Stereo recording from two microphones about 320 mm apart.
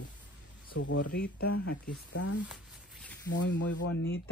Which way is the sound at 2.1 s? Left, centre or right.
Left.